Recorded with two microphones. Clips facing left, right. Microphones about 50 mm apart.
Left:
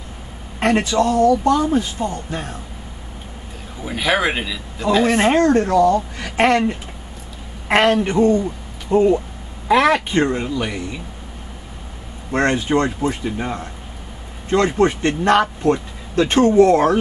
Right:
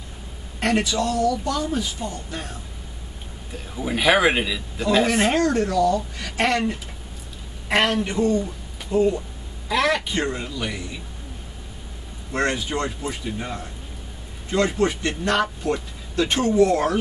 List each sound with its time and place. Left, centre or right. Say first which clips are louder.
0.6 s a man's voice: left 5 dB; left
3.8 s speech: right 1 dB; centre
5.0 s speech: left 5 dB; left
5.4 s a man's voice: left 6 dB; left
7.6 s a woman's voice: left 6 dB; left
12.3 s a man's voice: left 6 dB; left